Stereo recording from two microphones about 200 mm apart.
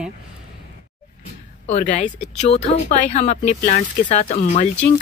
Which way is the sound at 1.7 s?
35° left (ahead or behind).